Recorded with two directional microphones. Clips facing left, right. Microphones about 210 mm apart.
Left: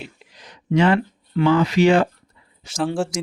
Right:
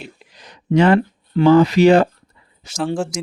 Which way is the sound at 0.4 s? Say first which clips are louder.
Right 3 dB; 40° right (ahead or behind).